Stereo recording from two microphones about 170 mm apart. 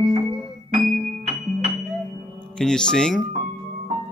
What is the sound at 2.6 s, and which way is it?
Mantra, 5° left (ahead or behind).